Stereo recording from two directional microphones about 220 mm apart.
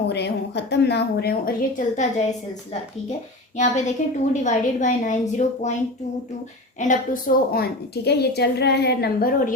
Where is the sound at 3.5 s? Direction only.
35° left (ahead or behind).